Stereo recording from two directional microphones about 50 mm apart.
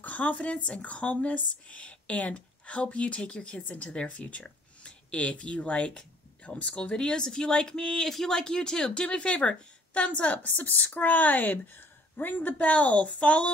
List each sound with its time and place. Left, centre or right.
0.0 s speech: left